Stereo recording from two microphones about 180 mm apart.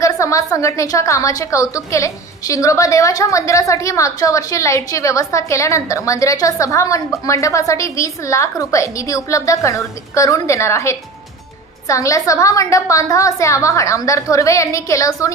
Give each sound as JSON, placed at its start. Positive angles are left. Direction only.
{"t": 0.0, "sound": "a woman's voice", "side_deg": 15}